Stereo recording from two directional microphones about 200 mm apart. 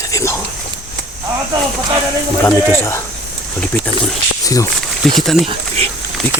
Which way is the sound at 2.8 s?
15° left (ahead or behind).